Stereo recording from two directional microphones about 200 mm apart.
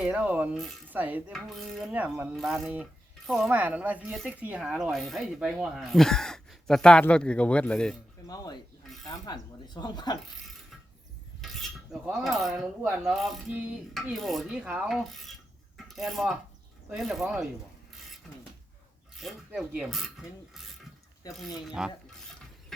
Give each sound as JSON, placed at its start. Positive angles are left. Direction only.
{"t": 0.0, "sound": "speech", "side_deg": -10}
{"t": 8.3, "sound": "speech", "side_deg": 20}
{"t": 11.3, "sound": "cutlery", "side_deg": 0}
{"t": 12.0, "sound": "speech", "side_deg": 0}
{"t": 19.1, "sound": "speech", "side_deg": 0}
{"t": 21.7, "sound": "speech", "side_deg": -5}